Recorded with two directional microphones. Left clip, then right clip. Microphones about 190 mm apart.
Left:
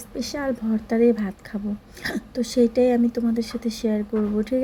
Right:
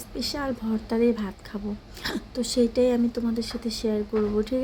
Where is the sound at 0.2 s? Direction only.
10° left (ahead or behind).